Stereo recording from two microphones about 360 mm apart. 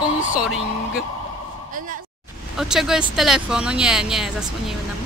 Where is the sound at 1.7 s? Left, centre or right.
Right.